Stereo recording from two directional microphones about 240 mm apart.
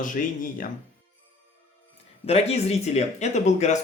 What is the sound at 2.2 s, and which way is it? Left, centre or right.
Speech, left.